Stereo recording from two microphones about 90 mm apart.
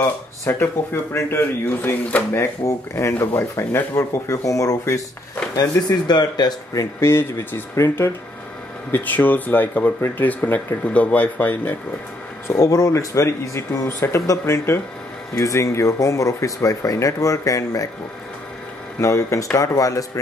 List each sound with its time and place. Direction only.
0.0 s speech: 25° left (ahead or behind)
2.3 s speech: 30° left (ahead or behind)
5.6 s speech: 50° left (ahead or behind)
7.0 s speech: 25° left (ahead or behind)
8.9 s speech: 20° left (ahead or behind)
12.4 s speech: 40° left (ahead or behind)
18.9 s speech: 35° left (ahead or behind)